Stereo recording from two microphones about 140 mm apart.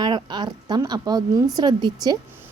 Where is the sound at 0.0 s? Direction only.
30° right (ahead or behind).